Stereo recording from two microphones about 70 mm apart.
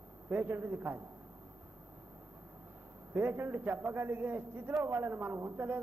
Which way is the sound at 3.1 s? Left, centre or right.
Right.